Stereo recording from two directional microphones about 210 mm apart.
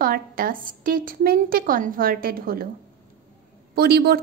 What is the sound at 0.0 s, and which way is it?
A woman's voice, 45° right (ahead or behind).